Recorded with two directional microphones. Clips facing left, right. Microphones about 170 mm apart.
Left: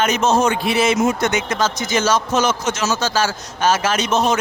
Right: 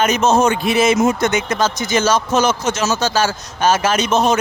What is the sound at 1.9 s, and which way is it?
Speech, 55° right (ahead or behind).